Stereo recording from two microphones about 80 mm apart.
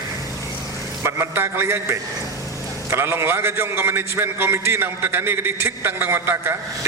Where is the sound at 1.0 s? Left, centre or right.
Right.